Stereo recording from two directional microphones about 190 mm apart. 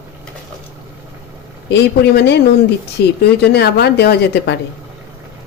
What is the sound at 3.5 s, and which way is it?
A woman's voice, 60° left (ahead or behind).